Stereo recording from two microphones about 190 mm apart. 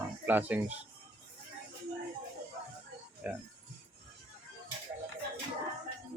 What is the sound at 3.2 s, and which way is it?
Speech, 5° right (ahead or behind).